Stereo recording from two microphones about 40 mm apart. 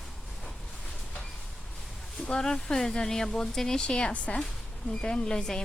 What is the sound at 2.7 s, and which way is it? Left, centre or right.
A woman's voice, centre.